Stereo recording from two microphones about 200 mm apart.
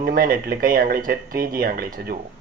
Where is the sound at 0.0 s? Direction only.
45° right (ahead or behind).